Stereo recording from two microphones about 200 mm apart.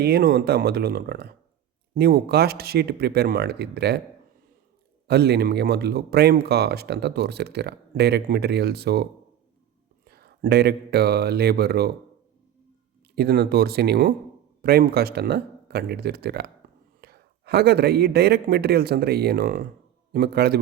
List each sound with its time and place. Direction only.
0.0 s speech: 55° right (ahead or behind)
5.0 s speech: 55° right (ahead or behind)
13.1 s a man's voice: 50° right (ahead or behind)